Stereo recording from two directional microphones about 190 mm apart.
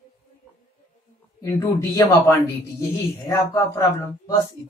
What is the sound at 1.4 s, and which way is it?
A man's voice, 15° left (ahead or behind).